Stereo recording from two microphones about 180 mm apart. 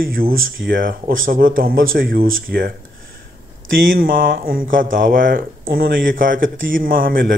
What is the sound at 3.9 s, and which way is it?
Speech, 50° right (ahead or behind).